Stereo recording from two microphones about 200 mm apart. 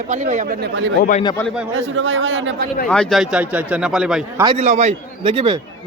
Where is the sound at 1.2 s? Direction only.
20° left (ahead or behind).